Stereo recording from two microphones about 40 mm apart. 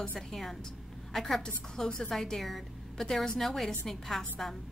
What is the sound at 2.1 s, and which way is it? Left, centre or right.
A woman's voice, centre.